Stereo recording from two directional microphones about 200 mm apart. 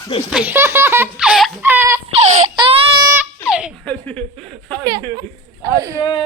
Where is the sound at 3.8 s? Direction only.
5° left (ahead or behind).